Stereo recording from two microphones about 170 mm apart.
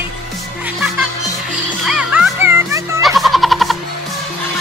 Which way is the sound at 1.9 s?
5° right (ahead or behind).